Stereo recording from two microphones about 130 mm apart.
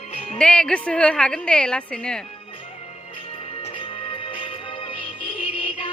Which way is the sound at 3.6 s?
40° left (ahead or behind).